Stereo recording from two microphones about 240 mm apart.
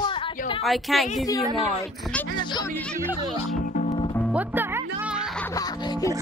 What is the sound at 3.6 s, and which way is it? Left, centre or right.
Music, left.